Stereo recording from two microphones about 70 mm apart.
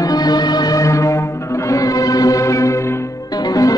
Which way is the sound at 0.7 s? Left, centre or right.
Left.